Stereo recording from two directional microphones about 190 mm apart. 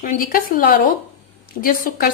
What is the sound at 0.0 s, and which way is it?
A woman's voice, 45° left (ahead or behind).